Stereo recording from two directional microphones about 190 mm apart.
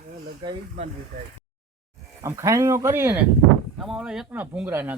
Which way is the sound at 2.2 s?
15° right (ahead or behind).